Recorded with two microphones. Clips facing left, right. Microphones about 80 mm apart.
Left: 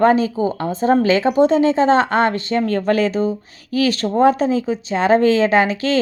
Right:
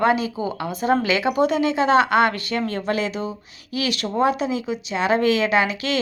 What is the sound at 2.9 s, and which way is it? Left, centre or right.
Speech, left.